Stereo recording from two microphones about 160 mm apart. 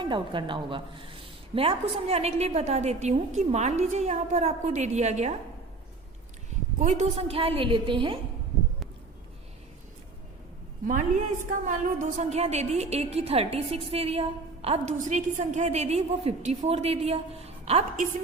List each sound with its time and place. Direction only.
0.0 s a woman's voice: 30° right (ahead or behind)
6.7 s a woman's voice: 45° right (ahead or behind)
10.8 s a woman's voice: 50° right (ahead or behind)
14.9 s a woman's voice: 50° right (ahead or behind)